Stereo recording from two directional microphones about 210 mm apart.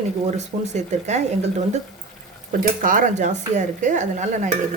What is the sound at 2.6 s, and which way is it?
Speech, 40° right (ahead or behind).